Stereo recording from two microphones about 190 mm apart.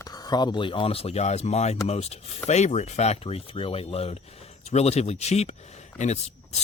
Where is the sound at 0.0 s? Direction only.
20° left (ahead or behind).